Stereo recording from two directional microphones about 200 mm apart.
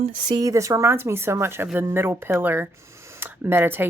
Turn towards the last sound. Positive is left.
turn(degrees=-10)  # may be behind; listen again after turning